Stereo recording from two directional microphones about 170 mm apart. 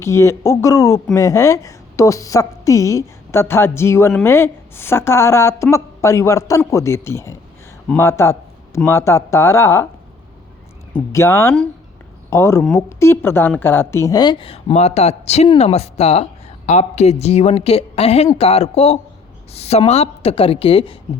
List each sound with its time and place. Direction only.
0.0 s a woman's voice: 15° left (ahead or behind)
11.1 s a woman's voice: 15° left (ahead or behind); by 20.9 s 35° left (ahead or behind)